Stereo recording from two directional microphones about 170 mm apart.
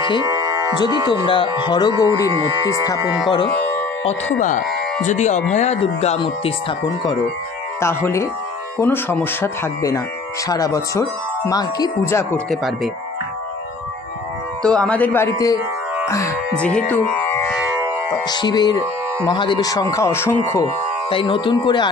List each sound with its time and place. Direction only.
0.2 s music: 25° right (ahead or behind)
1.0 s wind chime: 30° left (ahead or behind)
2.3 s speech: 30° right (ahead or behind)
3.7 s music: 10° left (ahead or behind)
4.4 s speech: 50° left (ahead or behind)
7.8 s speech: 15° left (ahead or behind)
10.5 s wind chime: 20° left (ahead or behind)
12.4 s speech: centre (ahead or behind)
14.6 s speech: 5° left (ahead or behind); by 15.6 s 20° left (ahead or behind)
16.1 s wind chime: 20° left (ahead or behind)
16.5 s speech: 5° left (ahead or behind)
18.3 s wind chime: 25° left (ahead or behind)
21.1 s wind chime: 30° left (ahead or behind)